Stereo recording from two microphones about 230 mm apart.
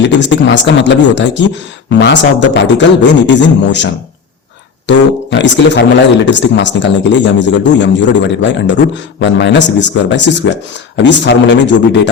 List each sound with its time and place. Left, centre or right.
0.0 s a man's voice: left